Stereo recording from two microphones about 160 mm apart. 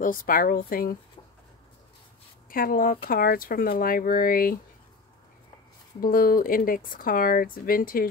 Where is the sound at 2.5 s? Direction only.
65° left (ahead or behind).